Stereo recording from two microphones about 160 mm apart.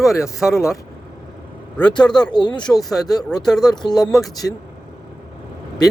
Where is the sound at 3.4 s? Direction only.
Centre (ahead or behind).